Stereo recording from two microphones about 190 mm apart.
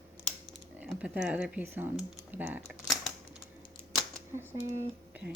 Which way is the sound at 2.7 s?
Centre (ahead or behind).